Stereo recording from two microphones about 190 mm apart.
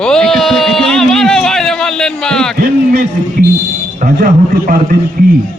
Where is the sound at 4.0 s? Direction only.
45° right (ahead or behind).